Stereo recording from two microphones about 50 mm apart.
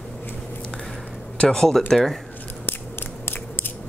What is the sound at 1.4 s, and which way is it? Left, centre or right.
Speech, centre.